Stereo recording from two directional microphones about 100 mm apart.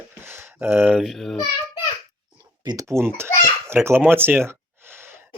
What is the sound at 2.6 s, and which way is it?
Speech, 35° right (ahead or behind).